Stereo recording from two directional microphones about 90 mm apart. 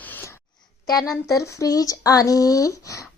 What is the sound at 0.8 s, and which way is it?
Speech, 45° left (ahead or behind).